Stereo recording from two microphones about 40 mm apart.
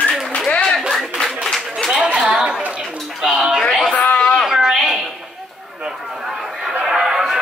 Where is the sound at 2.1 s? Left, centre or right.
Right.